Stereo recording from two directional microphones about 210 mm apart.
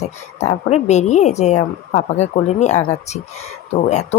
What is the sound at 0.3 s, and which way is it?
Speech, 30° left (ahead or behind).